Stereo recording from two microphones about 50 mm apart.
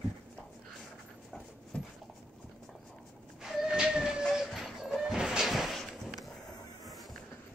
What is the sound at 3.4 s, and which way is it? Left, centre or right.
Train, centre.